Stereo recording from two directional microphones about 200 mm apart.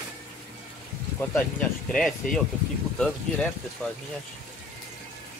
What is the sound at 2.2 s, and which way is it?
Speech, 40° left (ahead or behind).